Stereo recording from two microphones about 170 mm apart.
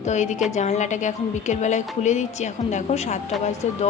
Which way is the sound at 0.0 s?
45° left (ahead or behind).